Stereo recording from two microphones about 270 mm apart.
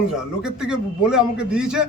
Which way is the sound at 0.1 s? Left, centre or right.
Centre.